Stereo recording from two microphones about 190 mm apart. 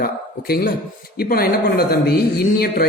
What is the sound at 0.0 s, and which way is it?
A man's voice, 50° left (ahead or behind).